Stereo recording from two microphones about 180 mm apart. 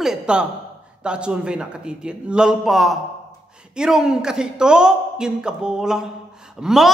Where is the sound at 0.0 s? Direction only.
5° right (ahead or behind).